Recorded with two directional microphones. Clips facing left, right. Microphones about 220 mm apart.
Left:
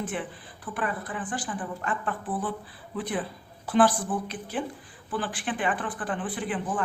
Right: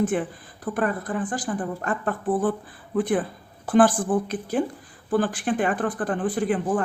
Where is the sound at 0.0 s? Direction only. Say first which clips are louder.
Right 9 dB; 45° right (ahead or behind).